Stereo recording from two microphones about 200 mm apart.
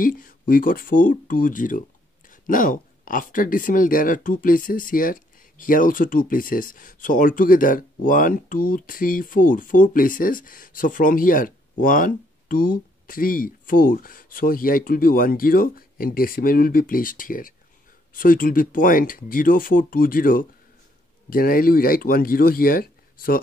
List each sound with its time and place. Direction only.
0.0 s speech: 45° left (ahead or behind)